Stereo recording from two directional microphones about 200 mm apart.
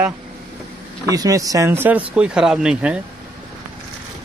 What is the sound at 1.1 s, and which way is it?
Speech, 15° right (ahead or behind).